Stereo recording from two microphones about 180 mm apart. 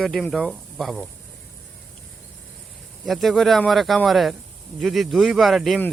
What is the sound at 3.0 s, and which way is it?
Speech, centre (ahead or behind).